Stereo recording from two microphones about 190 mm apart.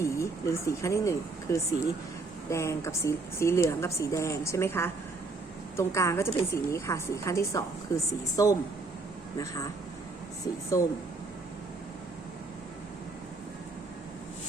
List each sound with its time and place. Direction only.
0.0 s a woman's voice: 15° left (ahead or behind)
10.4 s a woman's voice: 15° left (ahead or behind)